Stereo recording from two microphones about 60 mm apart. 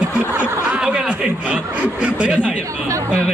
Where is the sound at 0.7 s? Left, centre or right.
Centre.